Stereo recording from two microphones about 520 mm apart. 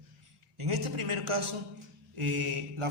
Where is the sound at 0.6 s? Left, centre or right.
Right.